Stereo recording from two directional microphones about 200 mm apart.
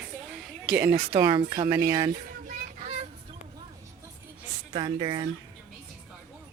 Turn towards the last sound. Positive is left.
turn(degrees=-25)  # may be behind; listen again after turning